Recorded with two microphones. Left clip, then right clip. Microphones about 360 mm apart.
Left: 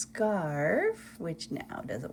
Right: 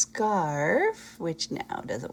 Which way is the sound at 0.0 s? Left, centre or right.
Centre.